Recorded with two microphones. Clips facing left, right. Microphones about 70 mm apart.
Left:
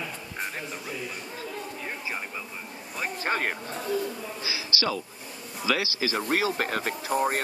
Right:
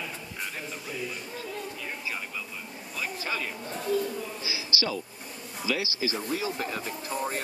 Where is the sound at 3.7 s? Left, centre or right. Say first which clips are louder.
Right 6 dB; centre.